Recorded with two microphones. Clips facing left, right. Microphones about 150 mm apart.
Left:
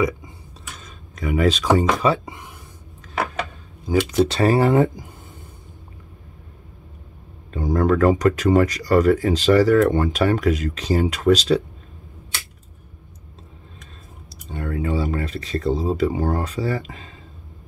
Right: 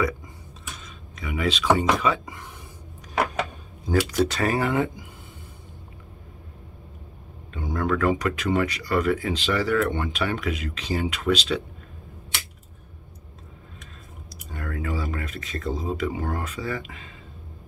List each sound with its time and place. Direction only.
1.1 s speech: 45° left (ahead or behind)
4.1 s speech: 25° left (ahead or behind)
7.5 s speech: 40° left (ahead or behind)
14.5 s speech: 25° left (ahead or behind)